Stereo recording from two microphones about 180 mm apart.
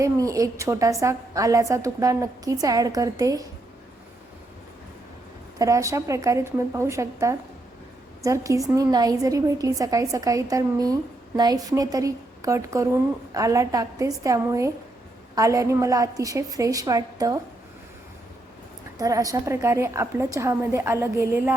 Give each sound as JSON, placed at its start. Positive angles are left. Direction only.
{"t": 0.0, "sound": "a woman's voice", "side_deg": -15}
{"t": 5.5, "sound": "a woman's voice", "side_deg": -15}
{"t": 18.9, "sound": "a woman's voice", "side_deg": -20}